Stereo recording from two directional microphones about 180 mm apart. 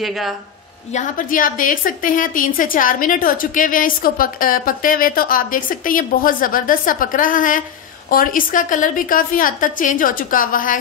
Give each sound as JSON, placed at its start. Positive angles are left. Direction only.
{"t": 0.0, "sound": "speech", "side_deg": 0}
{"t": 0.9, "sound": "a woman's voice", "side_deg": 50}